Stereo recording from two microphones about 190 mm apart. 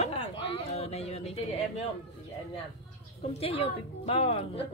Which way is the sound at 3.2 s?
30° left (ahead or behind).